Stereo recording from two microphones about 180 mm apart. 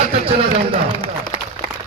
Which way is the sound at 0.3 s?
30° right (ahead or behind).